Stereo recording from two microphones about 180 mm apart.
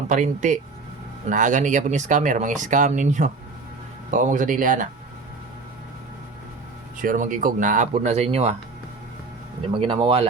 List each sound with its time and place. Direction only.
0.1 s speech: 45° right (ahead or behind)
7.0 s speech: 50° right (ahead or behind)
9.7 s speech: 30° right (ahead or behind)